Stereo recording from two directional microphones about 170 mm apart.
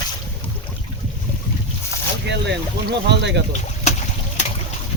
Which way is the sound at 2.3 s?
90° right.